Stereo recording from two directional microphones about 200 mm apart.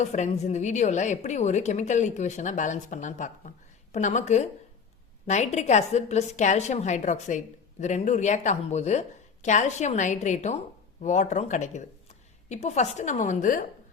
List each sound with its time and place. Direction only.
0.0 s a woman's voice: 35° left (ahead or behind)